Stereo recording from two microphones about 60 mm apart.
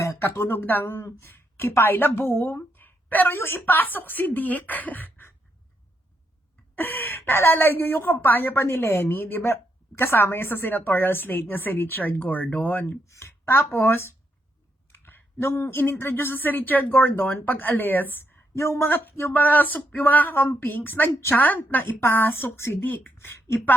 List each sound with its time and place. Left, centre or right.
0.2 s a woman's voice: left
6.7 s a woman's voice: left
13.1 s a woman's voice: left
18.5 s speech: left
19.0 s speech: left
20.3 s speech: left
20.6 s a woman's voice: left
22.8 s speech: left
23.1 s speech: left